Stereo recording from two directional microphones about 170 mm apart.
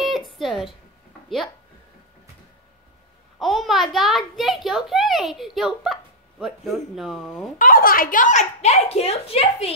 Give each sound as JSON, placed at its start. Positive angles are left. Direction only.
{"t": 0.0, "sound": "a sound", "side_deg": 0}
{"t": 3.3, "sound": "a child's voice", "side_deg": 0}
{"t": 7.5, "sound": "speech", "side_deg": 55}